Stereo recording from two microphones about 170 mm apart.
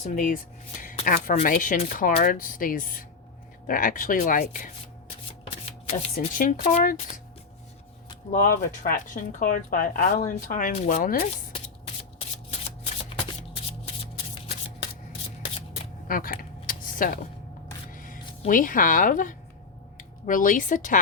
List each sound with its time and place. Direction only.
0.0 s speech: 50° left (ahead or behind)
6.1 s speech: 55° left (ahead or behind)
8.3 s speech: 50° left (ahead or behind)
12.5 s shuffling cards: 40° left (ahead or behind)
15.4 s shuffling cards: 35° left (ahead or behind)
16.0 s a sound: 55° left (ahead or behind)
17.9 s speech: 55° left (ahead or behind)